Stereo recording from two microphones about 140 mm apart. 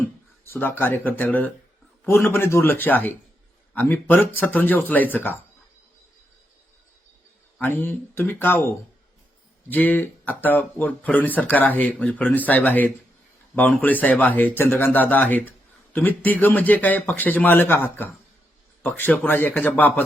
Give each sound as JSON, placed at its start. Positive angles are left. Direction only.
{"t": 0.4, "sound": "speech", "side_deg": 15}
{"t": 7.6, "sound": "speech", "side_deg": 15}